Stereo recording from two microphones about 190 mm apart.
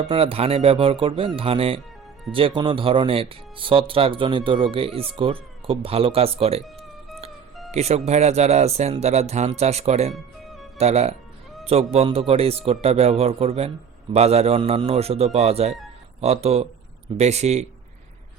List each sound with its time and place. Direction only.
0.1 s speech: 30° right (ahead or behind)
7.7 s speech: 35° right (ahead or behind)
10.4 s music: centre (ahead or behind)
10.8 s speech: 35° right (ahead or behind)